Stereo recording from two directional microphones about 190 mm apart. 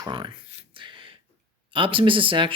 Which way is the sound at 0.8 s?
25° right (ahead or behind).